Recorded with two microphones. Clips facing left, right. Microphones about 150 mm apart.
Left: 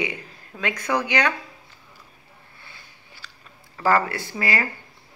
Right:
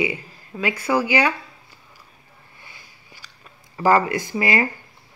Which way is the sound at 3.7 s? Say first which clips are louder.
Right 3 dB; 15° right (ahead or behind).